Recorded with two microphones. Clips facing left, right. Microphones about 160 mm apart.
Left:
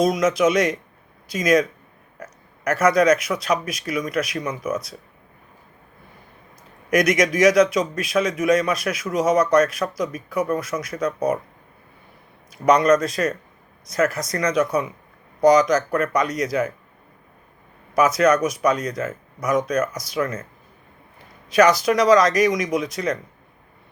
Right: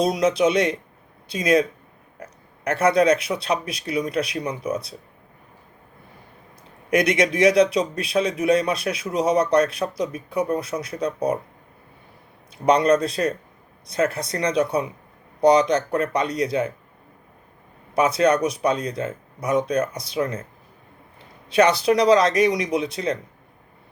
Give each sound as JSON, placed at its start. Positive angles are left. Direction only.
{"t": 0.0, "sound": "speech", "side_deg": -30}
{"t": 6.9, "sound": "speech", "side_deg": -30}
{"t": 12.6, "sound": "speech", "side_deg": -30}
{"t": 17.9, "sound": "speech", "side_deg": -30}
{"t": 21.5, "sound": "speech", "side_deg": -30}